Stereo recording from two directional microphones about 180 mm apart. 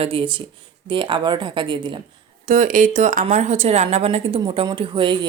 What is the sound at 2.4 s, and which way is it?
A woman's voice, 45° right (ahead or behind).